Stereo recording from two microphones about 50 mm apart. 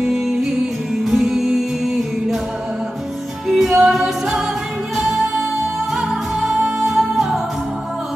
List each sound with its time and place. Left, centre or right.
0.0 s music: centre
3.4 s music: centre